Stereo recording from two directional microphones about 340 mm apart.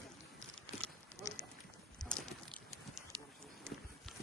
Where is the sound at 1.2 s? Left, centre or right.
Centre.